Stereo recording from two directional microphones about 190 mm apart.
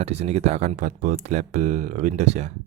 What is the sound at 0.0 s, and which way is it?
Speech, 35° right (ahead or behind).